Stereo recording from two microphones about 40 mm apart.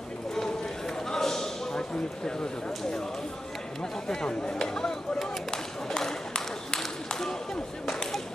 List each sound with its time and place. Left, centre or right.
1.1 s a sound: centre
4.1 s speech: centre
5.2 s run: centre